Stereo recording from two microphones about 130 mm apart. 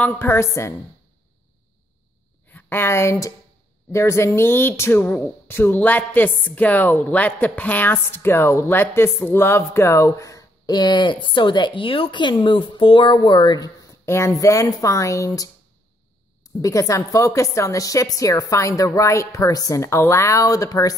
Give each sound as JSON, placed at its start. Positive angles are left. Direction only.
{"t": 0.0, "sound": "a woman's voice", "side_deg": 15}
{"t": 2.4, "sound": "a woman's voice", "side_deg": 15}
{"t": 14.0, "sound": "a woman's voice", "side_deg": 20}